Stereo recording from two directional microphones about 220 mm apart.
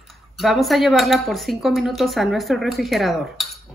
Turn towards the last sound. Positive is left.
turn(degrees=0)  # may be behind; listen again after turning